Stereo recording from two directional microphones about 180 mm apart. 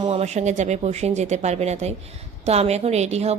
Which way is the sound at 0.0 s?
35° right (ahead or behind).